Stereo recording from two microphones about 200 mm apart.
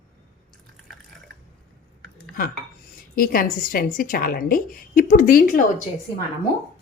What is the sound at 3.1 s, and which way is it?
A woman's voice, 45° left (ahead or behind).